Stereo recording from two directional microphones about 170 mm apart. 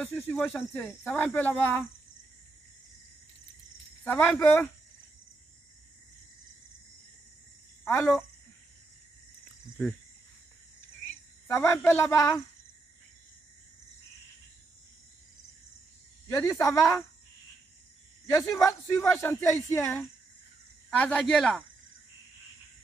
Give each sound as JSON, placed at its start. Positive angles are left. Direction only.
{"t": 0.0, "sound": "speech", "side_deg": 10}
{"t": 4.0, "sound": "speech", "side_deg": 10}
{"t": 7.8, "sound": "speech", "side_deg": 10}
{"t": 11.4, "sound": "speech", "side_deg": 15}
{"t": 16.3, "sound": "speech", "side_deg": 15}
{"t": 18.2, "sound": "speech", "side_deg": 20}